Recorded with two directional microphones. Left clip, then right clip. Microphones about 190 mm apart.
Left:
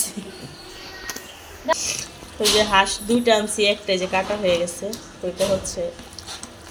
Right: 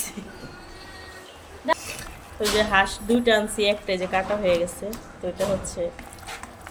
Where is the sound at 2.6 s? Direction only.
10° left (ahead or behind).